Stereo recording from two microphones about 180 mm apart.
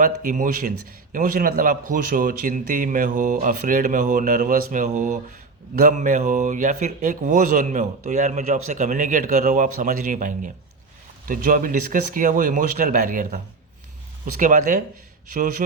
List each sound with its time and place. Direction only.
0.0 s a man's voice: 45° right (ahead or behind)